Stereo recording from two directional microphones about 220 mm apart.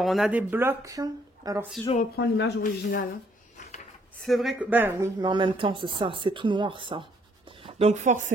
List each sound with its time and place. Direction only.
0.0 s speech: centre (ahead or behind); by 1.7 s 15° right (ahead or behind)
2.1 s speech: 50° left (ahead or behind)
4.2 s speech: centre (ahead or behind); by 8.3 s 35° right (ahead or behind)